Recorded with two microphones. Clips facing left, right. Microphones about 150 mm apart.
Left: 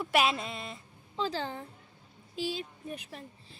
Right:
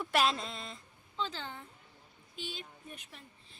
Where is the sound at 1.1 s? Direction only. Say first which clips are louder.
Left 6 dB; 40° left (ahead or behind).